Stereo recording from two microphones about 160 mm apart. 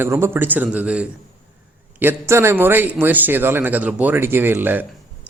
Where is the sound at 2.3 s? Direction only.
15° right (ahead or behind).